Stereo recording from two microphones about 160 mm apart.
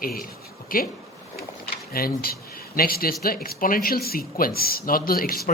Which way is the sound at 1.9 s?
70° left (ahead or behind).